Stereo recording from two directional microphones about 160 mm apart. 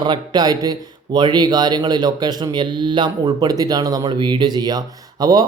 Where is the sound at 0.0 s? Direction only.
25° right (ahead or behind).